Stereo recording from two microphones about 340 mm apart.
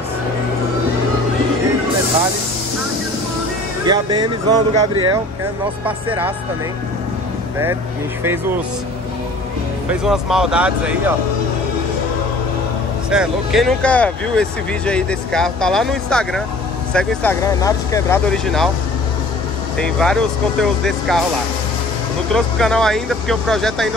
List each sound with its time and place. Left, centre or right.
3.8 s speech: centre
8.2 s speech: centre
10.0 s speech: centre
13.1 s speech: centre
19.8 s speech: centre
22.3 s speech: centre